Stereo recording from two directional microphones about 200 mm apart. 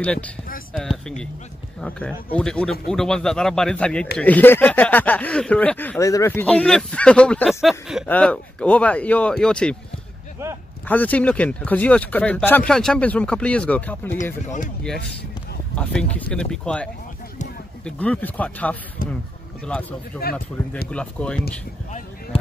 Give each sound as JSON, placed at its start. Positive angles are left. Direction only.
{"t": 0.0, "sound": "a man's voice", "side_deg": 5}
{"t": 10.9, "sound": "speech", "side_deg": 10}
{"t": 14.4, "sound": "speech", "side_deg": 40}
{"t": 15.7, "sound": "a man's voice", "side_deg": 5}
{"t": 22.3, "sound": "speech", "side_deg": 30}